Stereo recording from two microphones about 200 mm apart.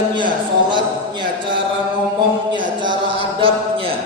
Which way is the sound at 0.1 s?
25° right (ahead or behind).